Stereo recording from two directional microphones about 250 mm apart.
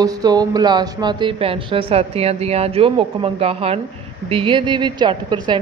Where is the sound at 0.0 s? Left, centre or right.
Centre.